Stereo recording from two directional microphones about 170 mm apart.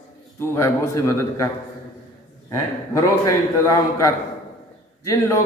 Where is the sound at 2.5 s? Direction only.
20° left (ahead or behind).